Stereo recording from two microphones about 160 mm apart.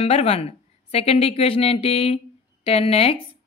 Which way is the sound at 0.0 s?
35° left (ahead or behind).